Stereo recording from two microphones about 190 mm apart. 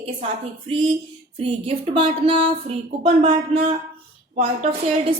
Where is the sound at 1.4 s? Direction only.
30° right (ahead or behind).